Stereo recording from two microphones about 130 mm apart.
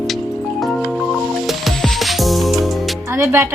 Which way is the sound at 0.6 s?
Centre (ahead or behind).